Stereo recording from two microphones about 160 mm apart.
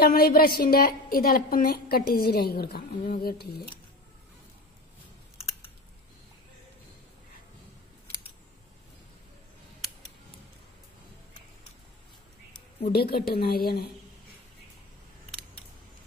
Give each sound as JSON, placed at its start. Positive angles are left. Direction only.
{"t": 0.0, "sound": "a woman's voice", "side_deg": 70}
{"t": 12.9, "sound": "a woman's voice", "side_deg": 75}